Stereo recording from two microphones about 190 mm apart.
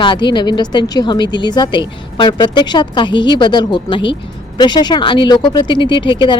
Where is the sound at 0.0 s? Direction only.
25° left (ahead or behind).